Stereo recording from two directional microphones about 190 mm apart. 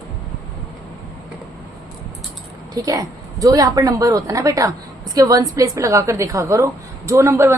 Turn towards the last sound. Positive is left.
turn(degrees=-15)  # may be behind; listen again after turning